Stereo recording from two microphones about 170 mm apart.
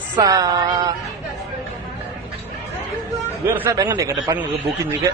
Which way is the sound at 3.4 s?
15° right (ahead or behind).